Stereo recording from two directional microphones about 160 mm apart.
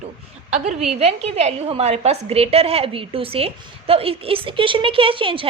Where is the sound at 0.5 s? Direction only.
45° right (ahead or behind).